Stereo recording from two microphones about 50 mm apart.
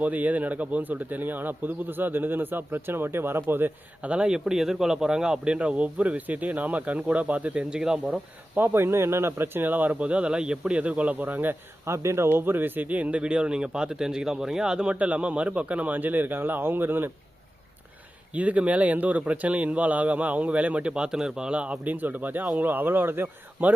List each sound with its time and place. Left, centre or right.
0.0 s speech: right
4.0 s speech: right
7.7 s speech: centre
8.5 s speech: right
10.0 s speech: right
11.9 s speech: right
18.3 s speech: right
21.9 s speech: right